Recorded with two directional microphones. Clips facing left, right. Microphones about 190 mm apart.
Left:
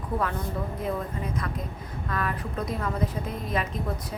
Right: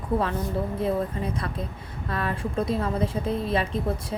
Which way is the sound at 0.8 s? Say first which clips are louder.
Right 5 dB; 30° right (ahead or behind).